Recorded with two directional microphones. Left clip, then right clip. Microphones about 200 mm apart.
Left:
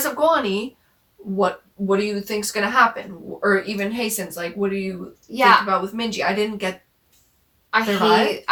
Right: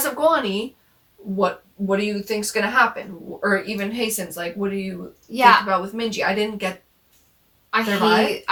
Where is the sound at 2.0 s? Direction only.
Centre (ahead or behind).